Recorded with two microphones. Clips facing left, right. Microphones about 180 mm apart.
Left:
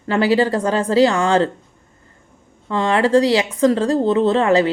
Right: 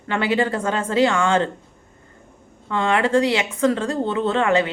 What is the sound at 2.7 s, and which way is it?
Speech, 35° left (ahead or behind).